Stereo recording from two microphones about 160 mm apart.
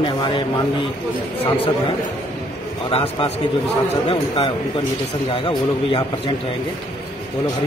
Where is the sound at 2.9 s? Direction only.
35° left (ahead or behind).